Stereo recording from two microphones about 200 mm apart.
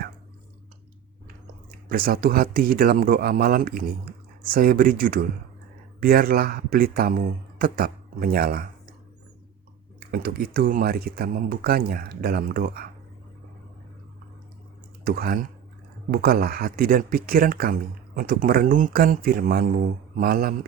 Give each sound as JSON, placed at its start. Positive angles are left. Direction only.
{"t": 1.9, "sound": "speech", "side_deg": -45}
{"t": 10.1, "sound": "speech", "side_deg": -50}
{"t": 15.0, "sound": "speech", "side_deg": -50}